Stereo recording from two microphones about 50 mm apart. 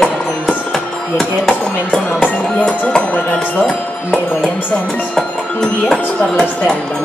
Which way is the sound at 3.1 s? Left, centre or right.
Left.